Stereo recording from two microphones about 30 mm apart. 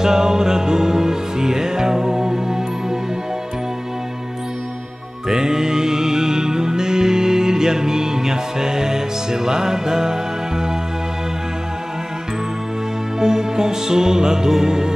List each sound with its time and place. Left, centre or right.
0.0 s music: centre
5.3 s music: centre
13.2 s music: centre